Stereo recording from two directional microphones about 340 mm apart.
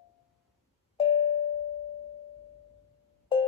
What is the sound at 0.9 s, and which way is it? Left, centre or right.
Doorbell, centre.